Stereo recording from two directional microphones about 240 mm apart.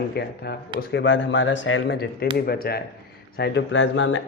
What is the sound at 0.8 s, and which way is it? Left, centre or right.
Speech, left.